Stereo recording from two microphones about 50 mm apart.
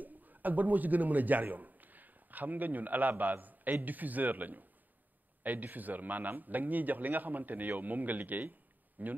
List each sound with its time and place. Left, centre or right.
0.0 s a man's voice: right